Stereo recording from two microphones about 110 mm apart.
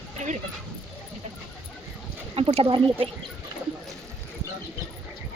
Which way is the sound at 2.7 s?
50° right (ahead or behind).